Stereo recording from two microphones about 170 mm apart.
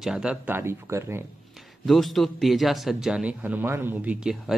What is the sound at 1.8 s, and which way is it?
Speech, centre (ahead or behind).